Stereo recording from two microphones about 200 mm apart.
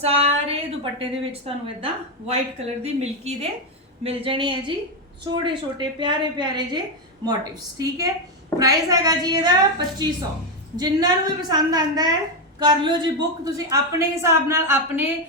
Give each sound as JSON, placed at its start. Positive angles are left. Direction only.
{"t": 0.0, "sound": "a woman's voice", "side_deg": -30}